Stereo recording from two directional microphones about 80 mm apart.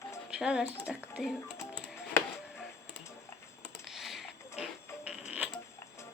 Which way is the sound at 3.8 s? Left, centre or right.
Centre.